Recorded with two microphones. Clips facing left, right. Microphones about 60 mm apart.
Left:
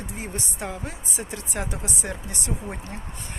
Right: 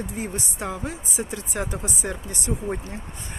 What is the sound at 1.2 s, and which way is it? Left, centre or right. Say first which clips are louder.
Speech: right 3 dB; centre.